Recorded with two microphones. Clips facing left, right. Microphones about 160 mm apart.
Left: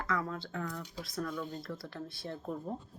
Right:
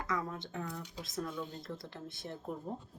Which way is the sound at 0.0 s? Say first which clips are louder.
Left 2 dB; 20° right (ahead or behind).